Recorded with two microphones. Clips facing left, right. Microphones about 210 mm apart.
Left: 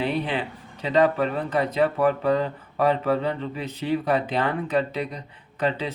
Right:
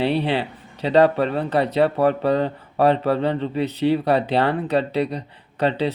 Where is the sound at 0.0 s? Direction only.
30° right (ahead or behind).